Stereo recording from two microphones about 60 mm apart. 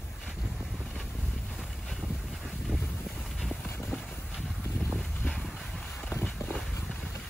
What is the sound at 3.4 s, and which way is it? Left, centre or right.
Vehicle, centre.